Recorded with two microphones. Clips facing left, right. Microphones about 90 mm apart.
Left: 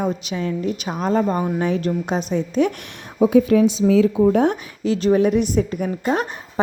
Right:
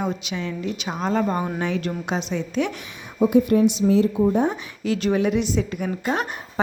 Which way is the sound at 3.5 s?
90° left.